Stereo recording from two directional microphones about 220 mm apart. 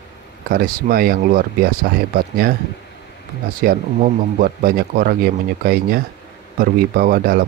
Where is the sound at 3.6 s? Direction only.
40° right (ahead or behind).